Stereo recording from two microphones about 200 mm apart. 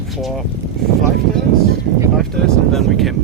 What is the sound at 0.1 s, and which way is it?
Speech, centre (ahead or behind).